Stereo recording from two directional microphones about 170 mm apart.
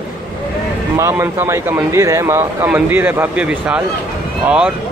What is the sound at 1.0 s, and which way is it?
Speech, 15° right (ahead or behind).